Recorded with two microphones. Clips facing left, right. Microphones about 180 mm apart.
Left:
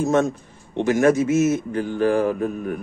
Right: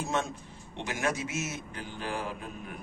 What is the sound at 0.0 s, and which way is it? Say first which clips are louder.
A man's voice: left 13 dB; 45° left (ahead or behind).